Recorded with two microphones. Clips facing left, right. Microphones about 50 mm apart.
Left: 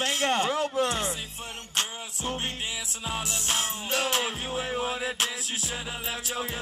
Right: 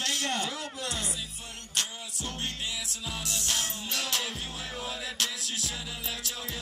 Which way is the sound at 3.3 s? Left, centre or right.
Left.